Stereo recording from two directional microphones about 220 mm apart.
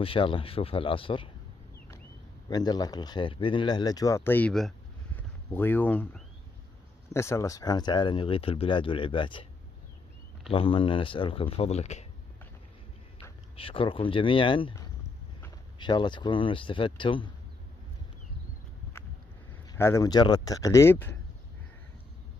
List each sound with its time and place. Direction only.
0.0 s speech: 25° left (ahead or behind)
2.5 s speech: 20° left (ahead or behind)
10.5 s speech: 25° left (ahead or behind)
13.6 s speech: 25° left (ahead or behind)
19.8 s speech: 15° left (ahead or behind)